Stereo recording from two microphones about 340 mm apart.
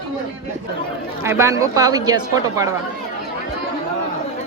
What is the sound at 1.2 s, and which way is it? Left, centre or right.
Speech, centre.